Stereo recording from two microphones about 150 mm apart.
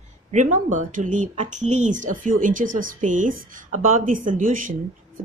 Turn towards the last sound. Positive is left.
turn(degrees=-65)  # may be behind; listen again after turning